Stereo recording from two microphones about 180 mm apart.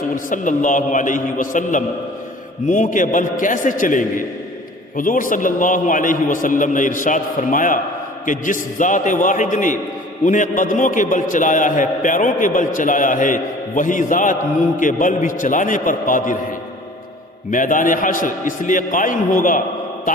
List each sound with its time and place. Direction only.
0.3 s a man's voice: 45° left (ahead or behind)
8.8 s a man's voice: 45° left (ahead or behind)
17.5 s a man's voice: 45° left (ahead or behind)